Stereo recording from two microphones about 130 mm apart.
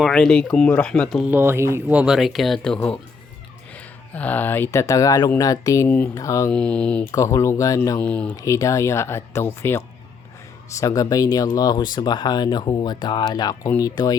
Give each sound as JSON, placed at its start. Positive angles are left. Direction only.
{"t": 0.0, "sound": "speech", "side_deg": 5}
{"t": 1.2, "sound": "speech", "side_deg": -15}
{"t": 6.5, "sound": "speech", "side_deg": 10}
{"t": 7.1, "sound": "speech", "side_deg": 25}
{"t": 8.0, "sound": "speech", "side_deg": 10}
{"t": 8.4, "sound": "speech", "side_deg": 25}